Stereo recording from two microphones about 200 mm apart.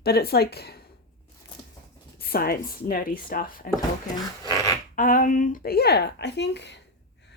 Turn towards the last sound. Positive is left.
turn(degrees=60)  # may be behind; listen again after turning